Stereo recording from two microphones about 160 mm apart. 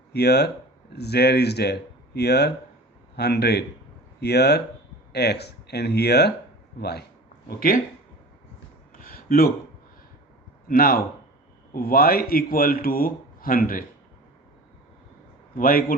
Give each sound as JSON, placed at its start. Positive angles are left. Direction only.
{"t": 0.1, "sound": "speech", "side_deg": 90}
{"t": 7.4, "sound": "speech", "side_deg": 65}
{"t": 8.9, "sound": "a sound", "side_deg": 65}
{"t": 10.7, "sound": "a man's voice", "side_deg": 65}
{"t": 15.5, "sound": "a man's voice", "side_deg": 60}